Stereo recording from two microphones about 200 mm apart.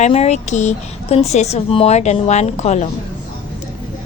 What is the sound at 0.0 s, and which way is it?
A woman's voice, 30° left (ahead or behind).